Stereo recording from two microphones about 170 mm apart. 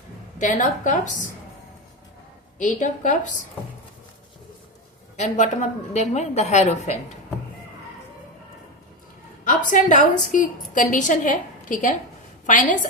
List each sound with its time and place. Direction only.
0.3 s a woman's voice: 50° left (ahead or behind)
2.6 s a woman's voice: 45° left (ahead or behind)
5.1 s a woman's voice: 45° left (ahead or behind)
9.5 s a woman's voice: 50° left (ahead or behind)